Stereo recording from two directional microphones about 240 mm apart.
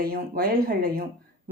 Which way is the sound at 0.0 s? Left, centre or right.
Right.